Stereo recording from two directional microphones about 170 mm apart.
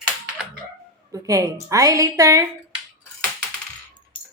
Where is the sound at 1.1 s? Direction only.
20° right (ahead or behind).